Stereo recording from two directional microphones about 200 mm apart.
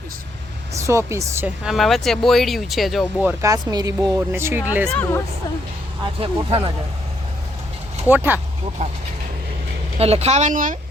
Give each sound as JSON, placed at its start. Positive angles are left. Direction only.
{"t": 0.7, "sound": "speech", "side_deg": -15}
{"t": 4.9, "sound": "speech", "side_deg": 5}
{"t": 6.0, "sound": "speech", "side_deg": -25}
{"t": 8.0, "sound": "speech", "side_deg": -10}
{"t": 8.8, "sound": "speech", "side_deg": -35}
{"t": 10.0, "sound": "speech", "side_deg": -30}